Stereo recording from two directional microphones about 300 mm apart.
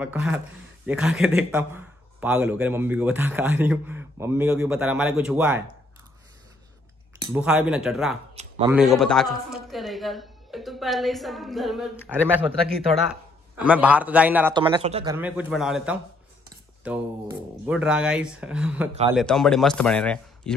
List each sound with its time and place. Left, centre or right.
0.0 s speech: centre
7.3 s speech: centre
8.4 s a sound: centre
8.7 s speech: centre
15.1 s speech: centre